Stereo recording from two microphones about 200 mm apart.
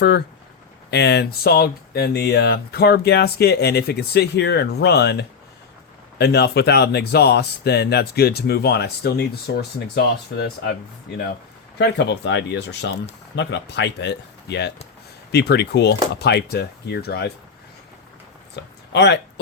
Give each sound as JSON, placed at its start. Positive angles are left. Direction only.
{"t": 0.9, "sound": "speech", "side_deg": 55}
{"t": 11.8, "sound": "speech", "side_deg": 60}
{"t": 18.5, "sound": "a sound", "side_deg": 60}